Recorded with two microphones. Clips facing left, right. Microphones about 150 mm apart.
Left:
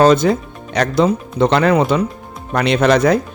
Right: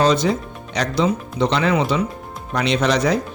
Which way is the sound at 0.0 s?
50° left (ahead or behind).